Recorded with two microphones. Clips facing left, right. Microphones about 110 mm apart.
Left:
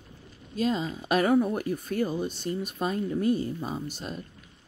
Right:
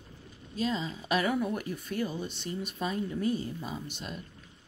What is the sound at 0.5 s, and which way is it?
Speech, 45° left (ahead or behind).